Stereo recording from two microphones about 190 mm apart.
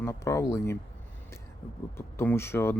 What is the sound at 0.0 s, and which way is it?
Speech, 15° left (ahead or behind).